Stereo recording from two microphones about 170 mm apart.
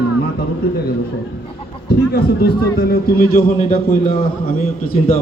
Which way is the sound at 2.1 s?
65° left (ahead or behind).